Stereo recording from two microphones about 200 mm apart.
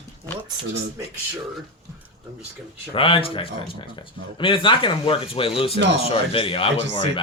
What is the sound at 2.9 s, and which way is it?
Speech, 25° left (ahead or behind).